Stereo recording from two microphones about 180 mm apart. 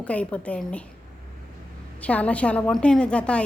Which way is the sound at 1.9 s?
10° left (ahead or behind).